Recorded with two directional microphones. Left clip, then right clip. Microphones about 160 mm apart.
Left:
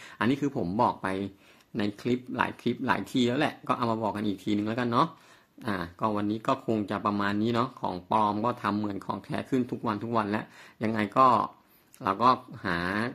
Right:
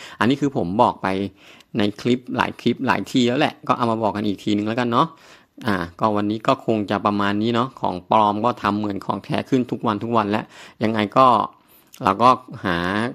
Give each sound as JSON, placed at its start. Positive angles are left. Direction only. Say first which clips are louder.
{"t": 0.0, "sound": "speech", "louder": "right 8 dB", "side_deg": -55}